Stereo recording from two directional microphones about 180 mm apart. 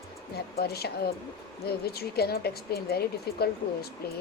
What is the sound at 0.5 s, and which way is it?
Speech, 60° left (ahead or behind).